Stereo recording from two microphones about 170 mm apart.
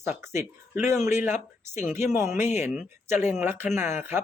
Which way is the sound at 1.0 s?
45° left (ahead or behind).